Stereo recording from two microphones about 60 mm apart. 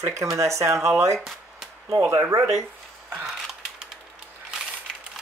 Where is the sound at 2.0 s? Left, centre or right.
Right.